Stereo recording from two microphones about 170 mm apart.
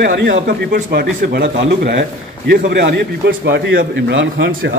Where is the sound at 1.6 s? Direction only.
80° right.